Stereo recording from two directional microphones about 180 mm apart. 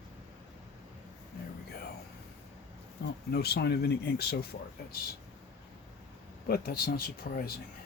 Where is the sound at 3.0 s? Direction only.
75° left (ahead or behind).